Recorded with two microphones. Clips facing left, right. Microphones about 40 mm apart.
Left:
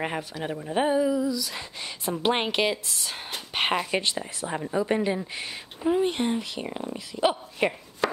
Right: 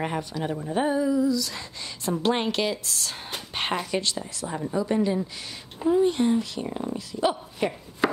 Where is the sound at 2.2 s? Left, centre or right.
Left.